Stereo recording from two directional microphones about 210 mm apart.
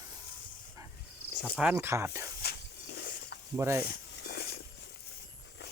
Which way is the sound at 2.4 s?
50° left (ahead or behind).